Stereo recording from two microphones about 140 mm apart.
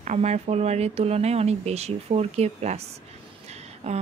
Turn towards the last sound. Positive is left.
turn(degrees=-50)  # may be behind; listen again after turning